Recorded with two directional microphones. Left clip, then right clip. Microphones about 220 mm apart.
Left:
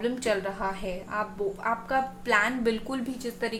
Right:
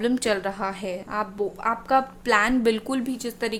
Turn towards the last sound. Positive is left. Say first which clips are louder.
# right 3 dB
turn(degrees=-45)  # may be behind; listen again after turning